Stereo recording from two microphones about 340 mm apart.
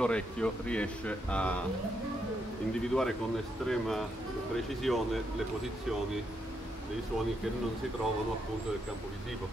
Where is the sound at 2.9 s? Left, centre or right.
Centre.